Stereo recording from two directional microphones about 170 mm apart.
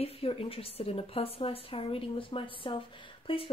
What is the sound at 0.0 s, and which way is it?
A woman's voice, 35° left (ahead or behind).